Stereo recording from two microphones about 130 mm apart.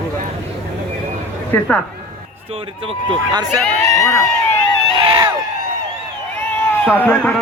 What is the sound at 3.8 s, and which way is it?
Crowd, 25° left (ahead or behind).